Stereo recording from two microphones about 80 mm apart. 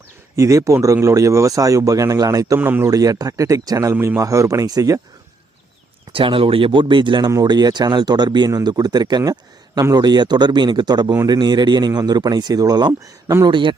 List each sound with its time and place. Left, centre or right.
0.3 s speech: right
2.6 s speech: right
2.8 s speech: right
6.1 s speech: right
7.4 s speech: right
12.9 s speech: right
13.4 s speech: right